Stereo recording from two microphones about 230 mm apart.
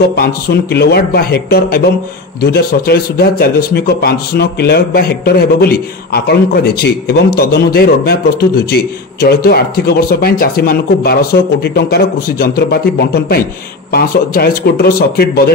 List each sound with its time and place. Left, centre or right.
0.1 s a man's voice: left